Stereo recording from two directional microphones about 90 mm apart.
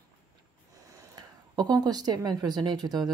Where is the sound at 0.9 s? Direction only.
45° right (ahead or behind).